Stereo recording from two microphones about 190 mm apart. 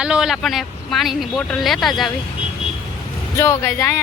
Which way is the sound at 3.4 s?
10° left (ahead or behind).